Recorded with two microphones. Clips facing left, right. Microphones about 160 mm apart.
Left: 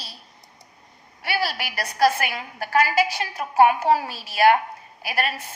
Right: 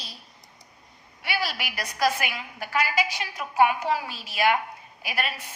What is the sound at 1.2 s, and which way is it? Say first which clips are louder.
A woman's voice: left 4 dB; 40° left (ahead or behind).